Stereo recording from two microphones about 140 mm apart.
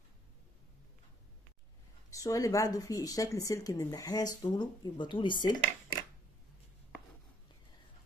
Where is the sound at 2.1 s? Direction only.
25° left (ahead or behind).